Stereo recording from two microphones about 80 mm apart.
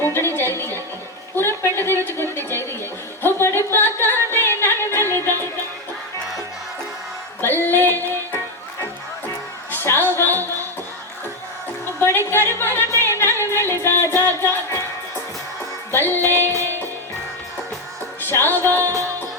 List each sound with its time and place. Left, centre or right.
0.1 s music: left
1.4 s a sound: left
3.2 s music: left
7.4 s female singing: left
9.7 s a sound: left
11.9 s a sound: left
15.9 s music: left
18.2 s music: left
18.8 s music: right